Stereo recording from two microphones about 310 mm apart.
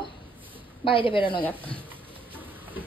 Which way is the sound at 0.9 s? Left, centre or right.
Centre.